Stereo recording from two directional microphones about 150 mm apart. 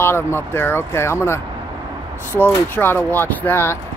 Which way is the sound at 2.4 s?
15° left (ahead or behind).